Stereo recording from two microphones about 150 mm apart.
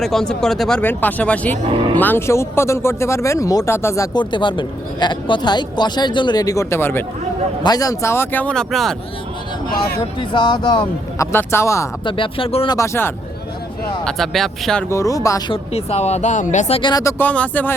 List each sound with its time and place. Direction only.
0.0 s speech: 5° left (ahead or behind)
9.6 s speech: 80° left
10.2 s speech: 30° left (ahead or behind)
11.3 s speech: 15° left (ahead or behind)
12.0 s speech: 35° left (ahead or behind)
12.6 s speech: 20° left (ahead or behind)
14.0 s speech: 5° left (ahead or behind)
14.8 s speech: 20° left (ahead or behind)
15.5 s speech: 45° left (ahead or behind)
16.9 s speech: 20° left (ahead or behind)